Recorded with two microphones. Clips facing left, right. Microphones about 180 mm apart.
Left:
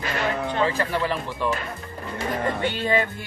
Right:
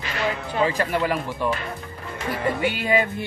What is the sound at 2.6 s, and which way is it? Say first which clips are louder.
Speech: right 2 dB; 10° right (ahead or behind).